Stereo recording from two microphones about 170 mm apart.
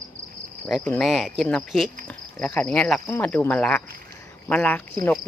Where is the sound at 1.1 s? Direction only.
Centre (ahead or behind).